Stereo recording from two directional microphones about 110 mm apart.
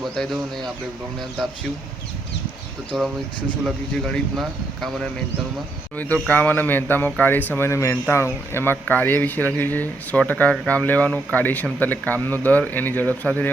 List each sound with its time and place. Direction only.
0.0 s speech: centre (ahead or behind)
3.9 s speech: 5° left (ahead or behind)
6.2 s speech: 15° left (ahead or behind)